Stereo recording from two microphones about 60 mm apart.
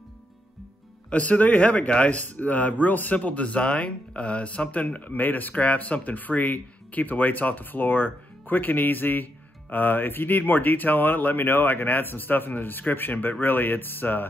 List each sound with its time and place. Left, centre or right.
1.1 s a man's voice: left